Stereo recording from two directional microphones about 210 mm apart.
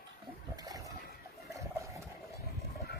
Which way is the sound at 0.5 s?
20° right (ahead or behind).